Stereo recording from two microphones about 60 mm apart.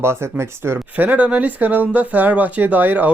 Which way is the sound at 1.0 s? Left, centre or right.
Right.